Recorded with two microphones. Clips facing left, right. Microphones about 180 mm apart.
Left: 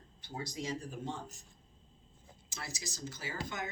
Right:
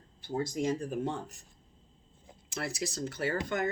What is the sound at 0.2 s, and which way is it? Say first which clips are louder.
Speech: right 9 dB; 50° right (ahead or behind).